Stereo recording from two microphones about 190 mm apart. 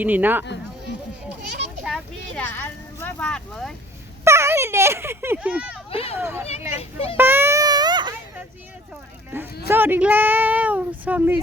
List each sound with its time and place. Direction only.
0.0 s speech: 10° right (ahead or behind)
1.8 s speech: centre (ahead or behind)
4.2 s speech: 15° right (ahead or behind)
5.9 s a child's voice: 30° left (ahead or behind)
6.1 s speech: 10° right (ahead or behind)
6.7 s a child's voice: 30° left (ahead or behind)
7.2 s a sound: 10° right (ahead or behind)
9.3 s speech: 10° right (ahead or behind)